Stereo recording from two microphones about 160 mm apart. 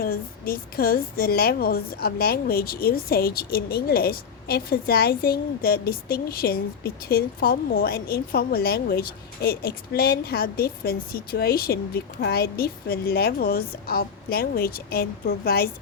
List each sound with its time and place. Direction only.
0.0 s a woman's voice: 65° left (ahead or behind)